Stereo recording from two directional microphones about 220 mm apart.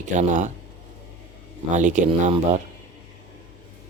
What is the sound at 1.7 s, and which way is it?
Speech, 35° right (ahead or behind).